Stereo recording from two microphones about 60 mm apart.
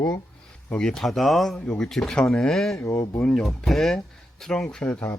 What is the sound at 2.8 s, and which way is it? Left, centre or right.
Speech, left.